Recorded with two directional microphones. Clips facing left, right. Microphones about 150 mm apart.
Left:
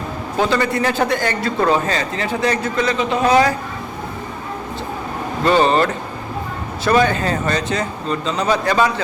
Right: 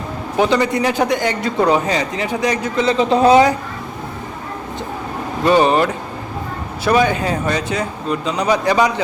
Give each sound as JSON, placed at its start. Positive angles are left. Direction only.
{"t": 0.3, "sound": "a man's voice", "side_deg": -15}
{"t": 2.8, "sound": "a man's voice", "side_deg": -30}
{"t": 5.4, "sound": "a man's voice", "side_deg": -15}